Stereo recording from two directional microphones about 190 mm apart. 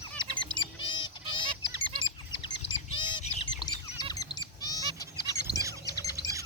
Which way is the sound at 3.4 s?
20° left (ahead or behind).